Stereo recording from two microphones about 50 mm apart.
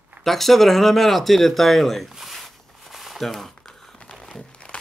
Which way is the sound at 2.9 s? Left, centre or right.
Centre.